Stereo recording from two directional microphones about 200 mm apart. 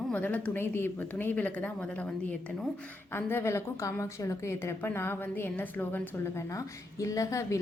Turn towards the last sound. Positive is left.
turn(degrees=15)  # may be behind; listen again after turning